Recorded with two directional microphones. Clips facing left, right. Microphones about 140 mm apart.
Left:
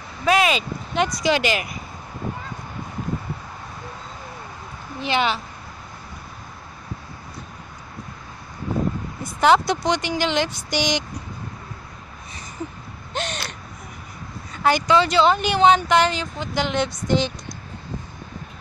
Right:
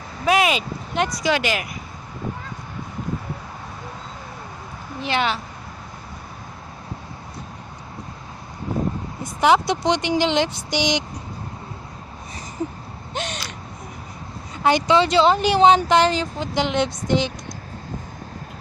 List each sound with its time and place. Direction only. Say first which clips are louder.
0.2 s speech: even; 10° right (ahead or behind)
5.0 s speech: left 1 dB; centre (ahead or behind)
9.2 s speech: even; 15° right (ahead or behind)
13.1 s a sound: left 1 dB; 10° right (ahead or behind)
14.6 s speech: right 1 dB; 25° right (ahead or behind)